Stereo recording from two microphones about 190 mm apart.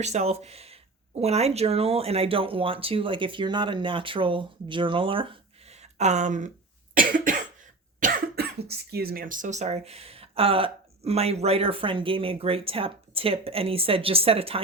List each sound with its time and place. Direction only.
0.0 s speech: 35° right (ahead or behind)
6.9 s cough: 45° right (ahead or behind)
7.9 s speech: 50° right (ahead or behind); by 14.6 s 30° right (ahead or behind)